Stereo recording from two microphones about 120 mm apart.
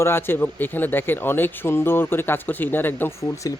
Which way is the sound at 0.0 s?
20° left (ahead or behind).